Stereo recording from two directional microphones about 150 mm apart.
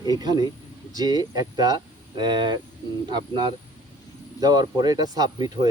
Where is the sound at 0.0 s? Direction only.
25° right (ahead or behind).